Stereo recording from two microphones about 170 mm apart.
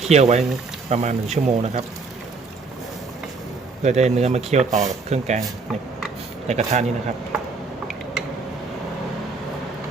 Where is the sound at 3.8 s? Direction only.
40° right (ahead or behind).